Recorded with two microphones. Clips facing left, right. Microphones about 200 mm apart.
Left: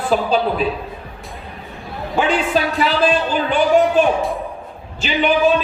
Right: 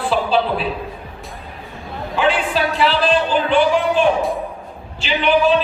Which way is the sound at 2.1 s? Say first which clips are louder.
Left 1 dB; 45° left (ahead or behind).